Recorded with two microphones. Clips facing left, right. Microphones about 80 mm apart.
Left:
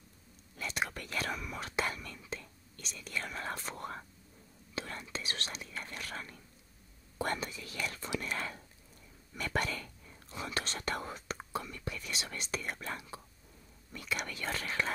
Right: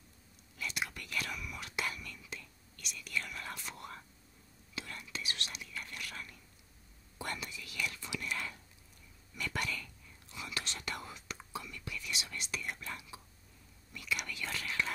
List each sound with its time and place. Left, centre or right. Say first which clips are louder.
0.6 s whispering: left 3 dB; left
7.2 s speech: left 6 dB; left